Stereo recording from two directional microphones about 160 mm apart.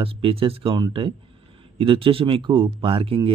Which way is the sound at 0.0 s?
35° right (ahead or behind).